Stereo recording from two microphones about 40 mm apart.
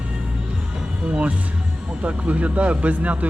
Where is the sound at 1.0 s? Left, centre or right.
Right.